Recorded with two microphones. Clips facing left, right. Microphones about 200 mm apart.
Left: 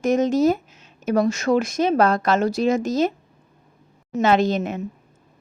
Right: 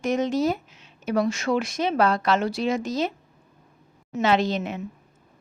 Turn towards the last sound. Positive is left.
turn(degrees=45)  # may be behind; listen again after turning